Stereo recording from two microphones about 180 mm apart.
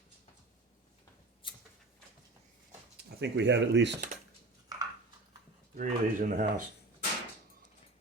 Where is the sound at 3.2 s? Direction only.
75° right (ahead or behind).